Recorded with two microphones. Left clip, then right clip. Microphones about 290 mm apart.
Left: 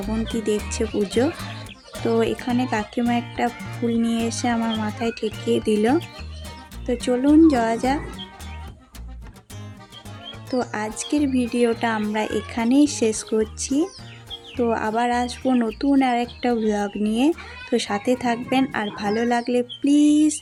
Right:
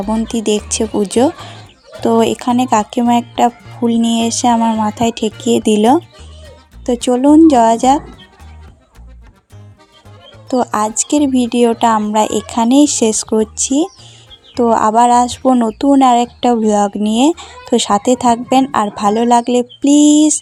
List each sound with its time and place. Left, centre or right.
0.7 s speech: right
10.5 s speech: right